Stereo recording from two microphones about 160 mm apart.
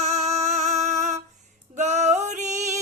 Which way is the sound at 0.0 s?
45° right (ahead or behind).